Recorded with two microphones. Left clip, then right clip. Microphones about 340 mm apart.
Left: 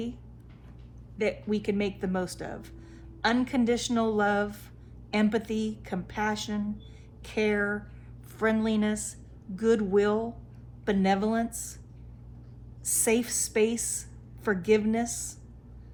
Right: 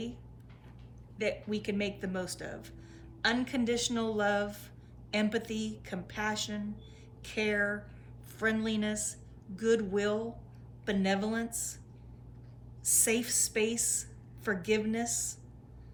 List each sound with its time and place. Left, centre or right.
1.2 s speech: centre
12.8 s speech: centre